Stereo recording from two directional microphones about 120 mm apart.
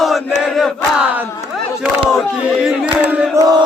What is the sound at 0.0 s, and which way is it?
Crowd, centre (ahead or behind).